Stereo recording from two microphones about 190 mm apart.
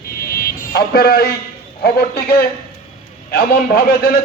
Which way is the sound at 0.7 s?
55° left (ahead or behind).